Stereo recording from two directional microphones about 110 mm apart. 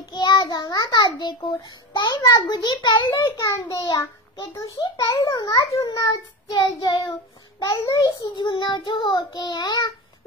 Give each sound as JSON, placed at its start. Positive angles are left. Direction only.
{"t": 0.1, "sound": "a child's voice", "side_deg": 40}
{"t": 3.3, "sound": "a child's voice", "side_deg": 30}
{"t": 6.5, "sound": "child singing", "side_deg": 40}
{"t": 7.6, "sound": "a child's voice", "side_deg": 30}
{"t": 8.2, "sound": "a child's voice", "side_deg": 45}